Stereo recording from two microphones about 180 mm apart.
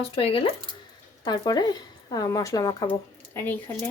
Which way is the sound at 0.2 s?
30° left (ahead or behind).